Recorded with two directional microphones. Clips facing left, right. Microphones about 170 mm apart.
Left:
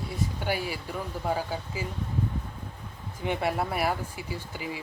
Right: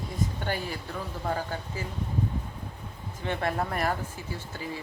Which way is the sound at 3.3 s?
10° left (ahead or behind).